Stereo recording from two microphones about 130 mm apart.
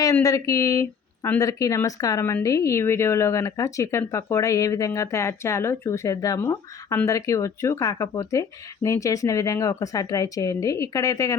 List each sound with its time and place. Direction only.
0.0 s speech: 25° left (ahead or behind)